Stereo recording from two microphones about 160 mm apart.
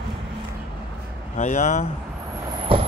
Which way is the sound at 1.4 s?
45° left (ahead or behind).